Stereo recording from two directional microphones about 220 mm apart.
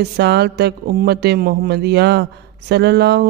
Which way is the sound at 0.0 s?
50° right (ahead or behind).